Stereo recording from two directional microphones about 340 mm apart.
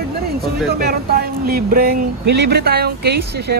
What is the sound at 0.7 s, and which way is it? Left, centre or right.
Speech, right.